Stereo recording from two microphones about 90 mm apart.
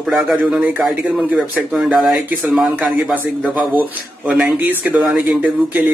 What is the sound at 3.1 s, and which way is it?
Speech, 20° right (ahead or behind).